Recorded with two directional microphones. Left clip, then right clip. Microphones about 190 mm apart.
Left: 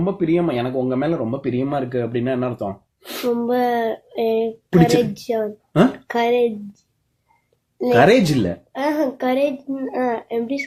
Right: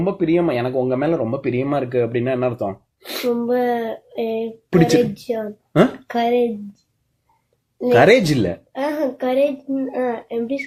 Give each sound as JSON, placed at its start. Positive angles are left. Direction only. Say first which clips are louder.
{"t": 0.0, "sound": "speech", "louder": "right 1 dB", "side_deg": -30}
{"t": 3.2, "sound": "a woman's voice", "louder": "even", "side_deg": 35}
{"t": 7.9, "sound": "speech", "louder": "right 1 dB", "side_deg": -25}
{"t": 8.7, "sound": "a woman's voice", "louder": "left 4 dB", "side_deg": 35}